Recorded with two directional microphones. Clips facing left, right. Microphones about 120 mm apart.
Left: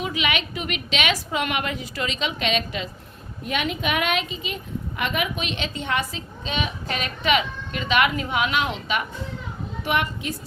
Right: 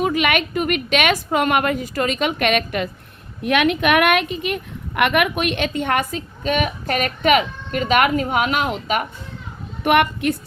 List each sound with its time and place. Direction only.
0.0 s a woman's voice: 50° right (ahead or behind)
9.8 s a woman's voice: 60° right (ahead or behind)